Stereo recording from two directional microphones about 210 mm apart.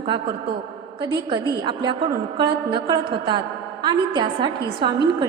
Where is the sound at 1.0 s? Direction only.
20° right (ahead or behind).